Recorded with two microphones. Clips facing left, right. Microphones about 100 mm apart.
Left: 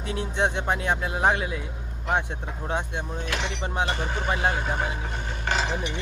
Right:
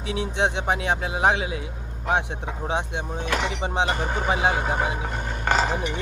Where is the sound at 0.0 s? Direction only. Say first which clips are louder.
Right 2 dB; 90° right.